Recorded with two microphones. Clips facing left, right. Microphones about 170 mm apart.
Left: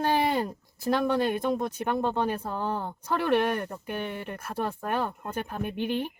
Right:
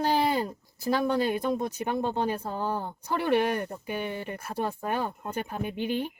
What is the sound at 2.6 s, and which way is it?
Speech, 5° right (ahead or behind).